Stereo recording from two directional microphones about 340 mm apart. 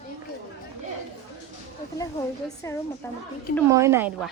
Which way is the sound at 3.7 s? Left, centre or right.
Centre.